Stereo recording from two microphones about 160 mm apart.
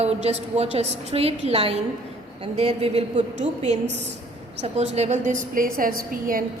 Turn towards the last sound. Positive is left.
turn(degrees=-60)  # may be behind; listen again after turning